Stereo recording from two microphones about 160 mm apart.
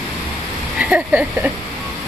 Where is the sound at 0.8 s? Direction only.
5° right (ahead or behind).